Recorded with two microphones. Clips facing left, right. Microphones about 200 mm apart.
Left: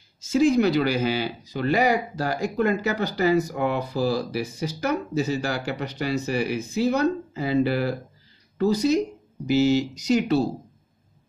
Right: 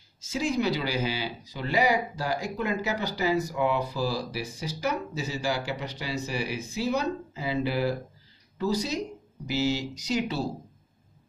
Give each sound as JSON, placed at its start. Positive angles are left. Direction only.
{"t": 0.3, "sound": "speech", "side_deg": 55}